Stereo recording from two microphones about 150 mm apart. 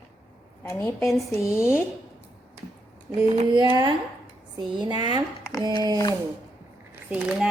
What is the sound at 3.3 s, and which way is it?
Speech, 40° right (ahead or behind).